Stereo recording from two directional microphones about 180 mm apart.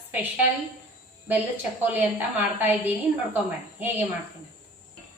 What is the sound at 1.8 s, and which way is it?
Speech, 10° right (ahead or behind).